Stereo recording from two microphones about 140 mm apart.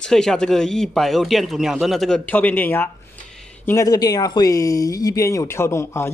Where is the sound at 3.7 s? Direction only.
25° left (ahead or behind).